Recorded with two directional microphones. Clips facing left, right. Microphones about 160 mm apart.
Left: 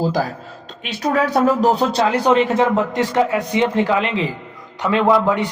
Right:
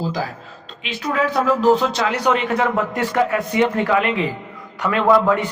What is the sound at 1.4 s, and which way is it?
A man's voice, 50° left (ahead or behind).